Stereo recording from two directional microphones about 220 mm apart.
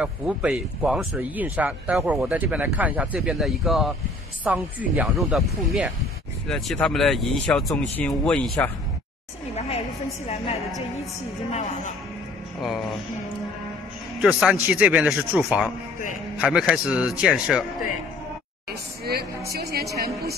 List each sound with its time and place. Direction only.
0.0 s speech: 5° right (ahead or behind)
10.2 s a woman's voice: 25° left (ahead or behind)
14.2 s speech: 5° right (ahead or behind)
18.7 s a woman's voice: 45° right (ahead or behind)